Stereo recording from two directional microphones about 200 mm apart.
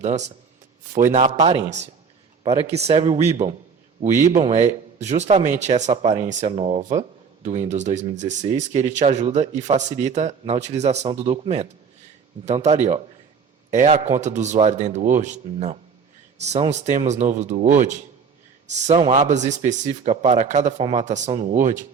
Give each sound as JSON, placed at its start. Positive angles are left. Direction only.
{"t": 0.0, "sound": "speech", "side_deg": -35}